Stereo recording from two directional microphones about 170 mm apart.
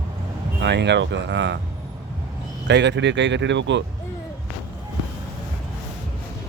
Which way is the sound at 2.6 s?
90° right.